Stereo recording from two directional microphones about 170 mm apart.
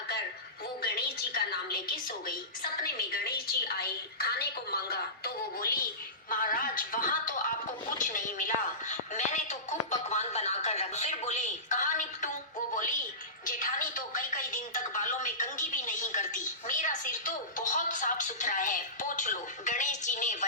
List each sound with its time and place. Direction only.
0.8 s music: 70° left (ahead or behind)
2.0 s a woman's voice: 60° left (ahead or behind)
13.4 s music: 50° left (ahead or behind)